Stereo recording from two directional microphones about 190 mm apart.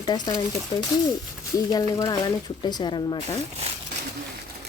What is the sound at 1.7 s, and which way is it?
Speech, 20° left (ahead or behind).